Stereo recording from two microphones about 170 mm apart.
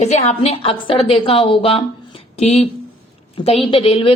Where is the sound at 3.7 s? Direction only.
35° left (ahead or behind).